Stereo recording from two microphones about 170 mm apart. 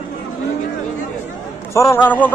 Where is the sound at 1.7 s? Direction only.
15° left (ahead or behind).